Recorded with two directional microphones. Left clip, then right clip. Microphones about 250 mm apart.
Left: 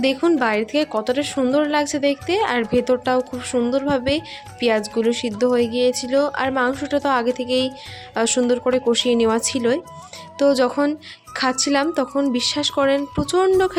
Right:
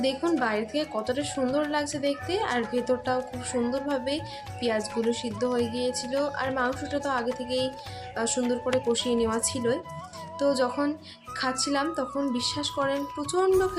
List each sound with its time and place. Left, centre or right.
0.0 s a woman's voice: left